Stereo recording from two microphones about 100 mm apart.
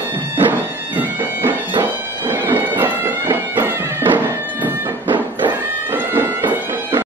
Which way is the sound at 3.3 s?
20° right (ahead or behind).